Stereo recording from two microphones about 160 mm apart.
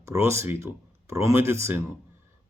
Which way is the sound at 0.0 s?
15° right (ahead or behind).